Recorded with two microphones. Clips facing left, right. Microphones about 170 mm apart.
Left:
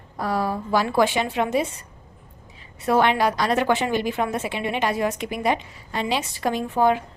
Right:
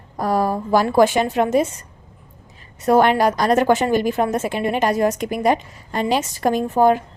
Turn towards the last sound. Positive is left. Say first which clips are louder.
# right 5 dB
turn(degrees=-45)  # may be behind; listen again after turning